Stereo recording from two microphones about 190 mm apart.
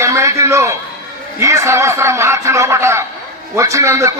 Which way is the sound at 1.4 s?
15° right (ahead or behind).